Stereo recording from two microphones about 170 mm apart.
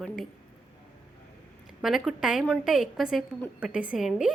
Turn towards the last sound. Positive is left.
turn(degrees=-5)  # may be behind; listen again after turning